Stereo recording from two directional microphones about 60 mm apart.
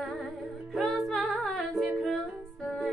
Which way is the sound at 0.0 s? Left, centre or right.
Centre.